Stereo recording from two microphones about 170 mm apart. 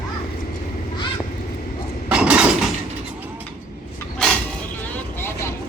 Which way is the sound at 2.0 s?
5° right (ahead or behind).